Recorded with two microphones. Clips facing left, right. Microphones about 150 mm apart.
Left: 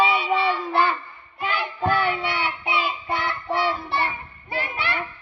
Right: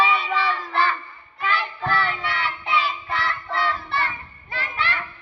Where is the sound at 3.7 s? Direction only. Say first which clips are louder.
Left 1 dB; 15° left (ahead or behind).